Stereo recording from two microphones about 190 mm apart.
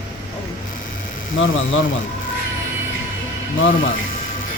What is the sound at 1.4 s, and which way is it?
Speech, 90° left.